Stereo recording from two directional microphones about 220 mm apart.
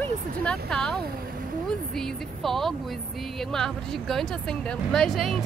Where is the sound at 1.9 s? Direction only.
Centre (ahead or behind).